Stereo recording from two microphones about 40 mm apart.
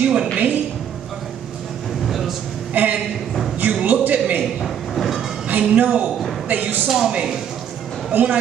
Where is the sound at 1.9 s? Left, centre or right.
Centre.